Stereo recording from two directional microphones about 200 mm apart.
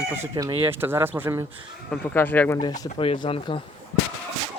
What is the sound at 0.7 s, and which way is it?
Speech, 10° right (ahead or behind).